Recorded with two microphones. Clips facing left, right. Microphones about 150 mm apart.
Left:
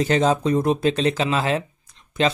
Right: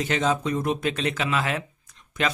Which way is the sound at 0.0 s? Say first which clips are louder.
Left 5 dB; 35° left (ahead or behind).